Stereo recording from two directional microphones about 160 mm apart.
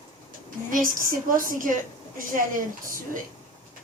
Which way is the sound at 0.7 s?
60° right (ahead or behind).